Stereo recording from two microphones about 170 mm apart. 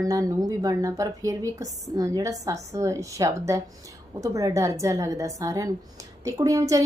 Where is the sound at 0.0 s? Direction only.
20° right (ahead or behind).